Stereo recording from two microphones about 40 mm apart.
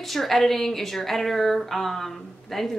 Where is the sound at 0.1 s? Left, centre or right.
Centre.